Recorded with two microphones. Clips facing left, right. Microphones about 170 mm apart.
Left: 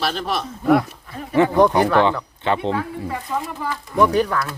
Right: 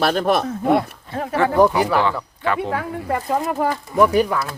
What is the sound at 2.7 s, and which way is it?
Speech, 60° right (ahead or behind).